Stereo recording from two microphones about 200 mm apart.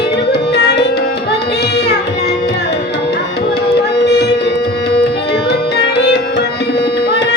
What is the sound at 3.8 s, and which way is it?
Music, 55° left (ahead or behind).